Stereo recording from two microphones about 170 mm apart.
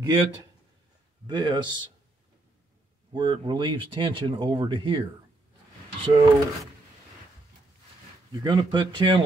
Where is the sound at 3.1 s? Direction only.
30° right (ahead or behind).